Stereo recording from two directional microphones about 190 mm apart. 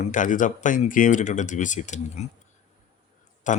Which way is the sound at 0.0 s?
40° left (ahead or behind).